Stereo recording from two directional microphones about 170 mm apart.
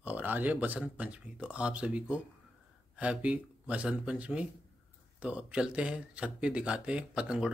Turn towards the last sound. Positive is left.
turn(degrees=-5)  # may be behind; listen again after turning